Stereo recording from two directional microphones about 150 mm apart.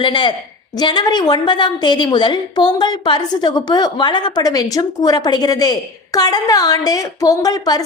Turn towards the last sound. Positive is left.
turn(degrees=25)  # may be behind; listen again after turning